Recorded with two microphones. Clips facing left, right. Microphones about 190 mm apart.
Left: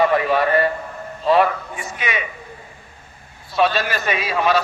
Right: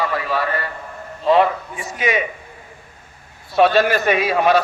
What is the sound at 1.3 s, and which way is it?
Speech, 20° right (ahead or behind).